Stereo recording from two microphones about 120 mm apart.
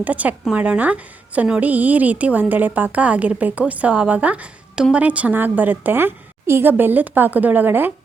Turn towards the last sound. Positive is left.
turn(degrees=-15)  # may be behind; listen again after turning